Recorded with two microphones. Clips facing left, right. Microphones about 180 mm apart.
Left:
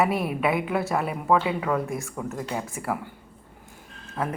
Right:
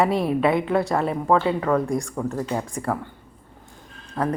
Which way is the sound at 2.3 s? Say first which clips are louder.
Right 3 dB; 35° right (ahead or behind).